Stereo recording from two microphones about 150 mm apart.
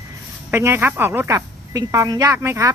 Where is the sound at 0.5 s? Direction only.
15° right (ahead or behind).